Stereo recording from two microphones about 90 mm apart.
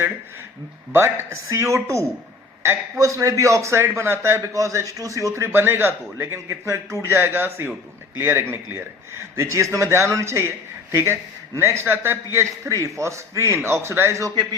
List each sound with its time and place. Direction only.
0.9 s a man's voice: 30° right (ahead or behind)